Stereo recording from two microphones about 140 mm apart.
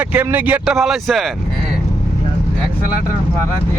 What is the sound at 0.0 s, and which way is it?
A man's voice, 10° right (ahead or behind).